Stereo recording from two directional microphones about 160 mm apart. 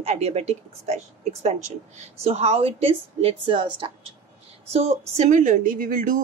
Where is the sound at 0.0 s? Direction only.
40° right (ahead or behind).